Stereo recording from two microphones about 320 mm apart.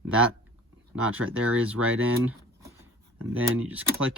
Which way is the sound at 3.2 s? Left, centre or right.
Centre.